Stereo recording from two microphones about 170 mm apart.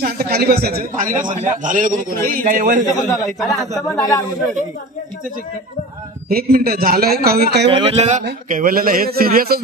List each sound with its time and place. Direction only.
0.0 s a man's voice: 65° right (ahead or behind)
3.0 s speech: 20° left (ahead or behind)
3.3 s a man's voice: centre (ahead or behind)
3.9 s speech: 20° left (ahead or behind)
6.2 s a man's voice: 60° right (ahead or behind)
7.8 s a man's voice: 40° right (ahead or behind)
8.5 s a man's voice: 55° right (ahead or behind)